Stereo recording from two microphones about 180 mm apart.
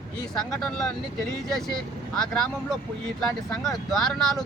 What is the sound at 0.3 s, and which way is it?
Speech, 5° left (ahead or behind).